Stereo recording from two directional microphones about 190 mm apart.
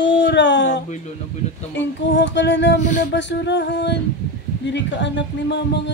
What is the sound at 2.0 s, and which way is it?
Speech, 70° left (ahead or behind).